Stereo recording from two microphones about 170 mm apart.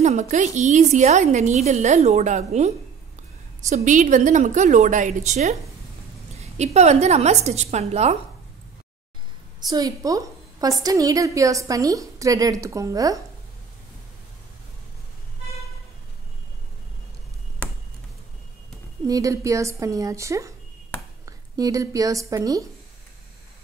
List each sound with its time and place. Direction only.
0.0 s a woman's voice: 45° right (ahead or behind)
3.7 s a woman's voice: 50° right (ahead or behind)
9.6 s a woman's voice: 25° right (ahead or behind)
19.0 s a woman's voice: 20° right (ahead or behind)